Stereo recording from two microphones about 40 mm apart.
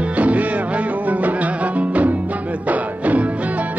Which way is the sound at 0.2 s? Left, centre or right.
Right.